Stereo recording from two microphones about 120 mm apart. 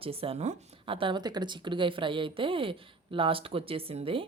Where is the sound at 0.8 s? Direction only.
45° right (ahead or behind).